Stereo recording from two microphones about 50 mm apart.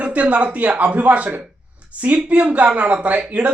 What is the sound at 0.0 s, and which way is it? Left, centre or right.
Speech, right.